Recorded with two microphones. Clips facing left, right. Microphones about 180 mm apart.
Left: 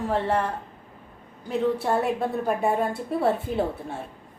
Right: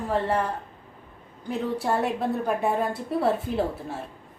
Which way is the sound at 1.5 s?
Centre (ahead or behind).